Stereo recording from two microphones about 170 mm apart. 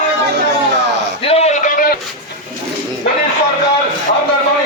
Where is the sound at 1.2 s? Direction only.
35° left (ahead or behind).